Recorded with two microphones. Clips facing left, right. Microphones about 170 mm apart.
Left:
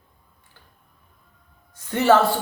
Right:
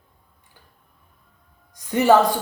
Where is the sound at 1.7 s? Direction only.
15° right (ahead or behind).